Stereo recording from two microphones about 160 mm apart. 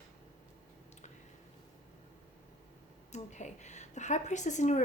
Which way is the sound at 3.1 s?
45° left (ahead or behind).